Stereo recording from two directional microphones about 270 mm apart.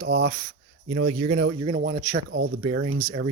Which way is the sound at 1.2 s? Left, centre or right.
Right.